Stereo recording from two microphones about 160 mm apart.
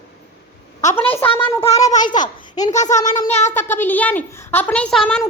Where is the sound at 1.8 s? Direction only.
25° left (ahead or behind).